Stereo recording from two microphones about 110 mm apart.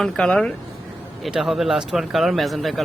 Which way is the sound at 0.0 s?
5° left (ahead or behind).